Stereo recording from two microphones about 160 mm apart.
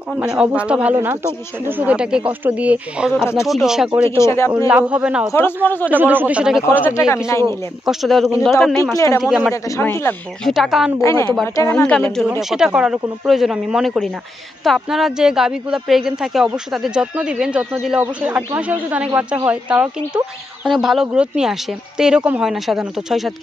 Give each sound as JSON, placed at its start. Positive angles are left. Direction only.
{"t": 0.1, "sound": "speech", "side_deg": -5}
{"t": 4.2, "sound": "speech", "side_deg": 15}
{"t": 4.6, "sound": "speech", "side_deg": -10}
{"t": 6.7, "sound": "speech", "side_deg": 15}
{"t": 7.8, "sound": "speech", "side_deg": 0}
{"t": 8.9, "sound": "speech", "side_deg": 20}
{"t": 9.2, "sound": "speech", "side_deg": -5}
{"t": 9.5, "sound": "speech", "side_deg": 15}
{"t": 10.4, "sound": "speech", "side_deg": 0}
{"t": 11.0, "sound": "speech", "side_deg": 20}
{"t": 11.8, "sound": "speech", "side_deg": 5}